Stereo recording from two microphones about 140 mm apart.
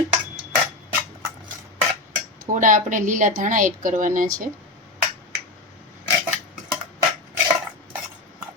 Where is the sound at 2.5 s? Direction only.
65° right (ahead or behind).